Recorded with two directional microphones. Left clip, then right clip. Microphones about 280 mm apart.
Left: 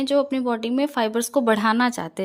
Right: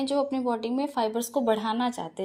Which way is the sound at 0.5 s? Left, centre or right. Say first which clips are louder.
Left 5 dB; left.